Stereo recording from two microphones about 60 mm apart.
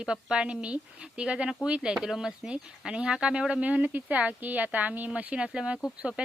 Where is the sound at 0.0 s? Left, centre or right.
Centre.